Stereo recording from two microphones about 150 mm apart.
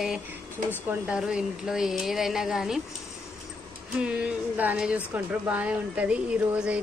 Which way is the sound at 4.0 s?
10° right (ahead or behind).